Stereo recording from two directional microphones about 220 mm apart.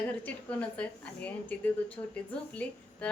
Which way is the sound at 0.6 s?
5° left (ahead or behind).